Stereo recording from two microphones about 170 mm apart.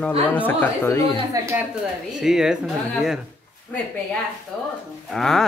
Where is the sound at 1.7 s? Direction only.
5° right (ahead or behind).